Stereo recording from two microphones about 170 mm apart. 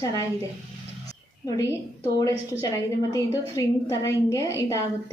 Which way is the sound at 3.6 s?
15° left (ahead or behind).